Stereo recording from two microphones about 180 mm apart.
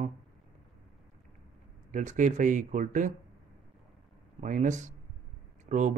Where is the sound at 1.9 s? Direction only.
45° right (ahead or behind).